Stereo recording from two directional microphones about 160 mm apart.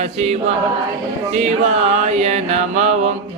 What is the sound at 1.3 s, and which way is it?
Mantra, 45° right (ahead or behind).